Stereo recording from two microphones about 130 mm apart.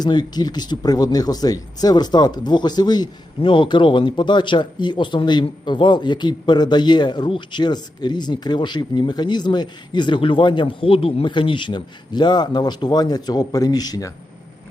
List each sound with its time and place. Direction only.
0.0 s speech: 35° left (ahead or behind)